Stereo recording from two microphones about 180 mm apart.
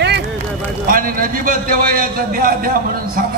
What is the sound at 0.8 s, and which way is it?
A man's voice, 50° right (ahead or behind).